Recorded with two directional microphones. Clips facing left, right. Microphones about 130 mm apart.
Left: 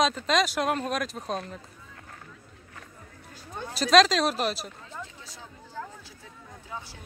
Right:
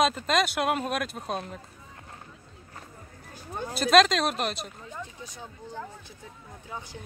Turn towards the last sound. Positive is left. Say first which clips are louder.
# right 1 dB
turn(degrees=-15)  # may be behind; listen again after turning